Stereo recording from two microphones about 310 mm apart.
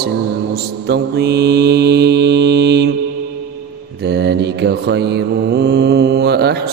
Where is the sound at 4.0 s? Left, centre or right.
Right.